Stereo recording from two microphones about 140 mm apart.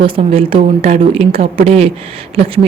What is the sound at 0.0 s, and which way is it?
A woman's voice, 45° right (ahead or behind).